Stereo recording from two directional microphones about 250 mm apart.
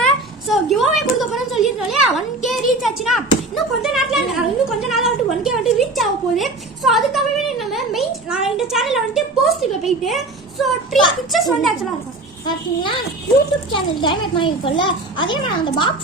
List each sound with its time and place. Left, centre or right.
0.0 s a sound: centre
2.5 s speech: centre
11.3 s speech: centre
12.5 s a child's voice: centre